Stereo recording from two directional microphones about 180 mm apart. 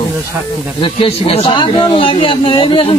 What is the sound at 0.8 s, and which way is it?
Speech, 30° left (ahead or behind).